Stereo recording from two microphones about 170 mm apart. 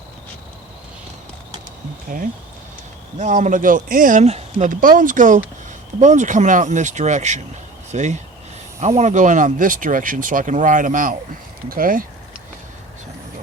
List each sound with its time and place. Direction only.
2.1 s speech: 50° right (ahead or behind)